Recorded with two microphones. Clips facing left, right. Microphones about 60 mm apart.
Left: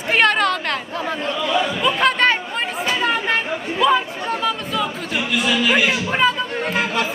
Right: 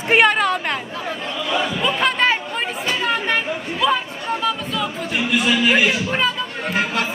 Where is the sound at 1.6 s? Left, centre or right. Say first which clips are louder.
Left 1 dB; centre.